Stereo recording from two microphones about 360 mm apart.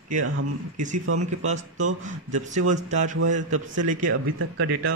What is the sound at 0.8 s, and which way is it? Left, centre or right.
Speech, right.